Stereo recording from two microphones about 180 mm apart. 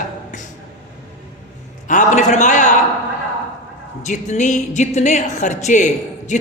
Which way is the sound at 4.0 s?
40° left (ahead or behind).